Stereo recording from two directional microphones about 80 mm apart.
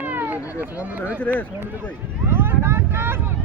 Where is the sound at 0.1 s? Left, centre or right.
Right.